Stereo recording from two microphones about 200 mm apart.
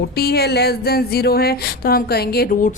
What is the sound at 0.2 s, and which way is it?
A woman's voice, 50° left (ahead or behind).